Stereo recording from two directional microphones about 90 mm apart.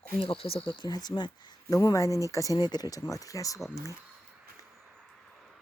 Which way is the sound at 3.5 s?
Centre (ahead or behind).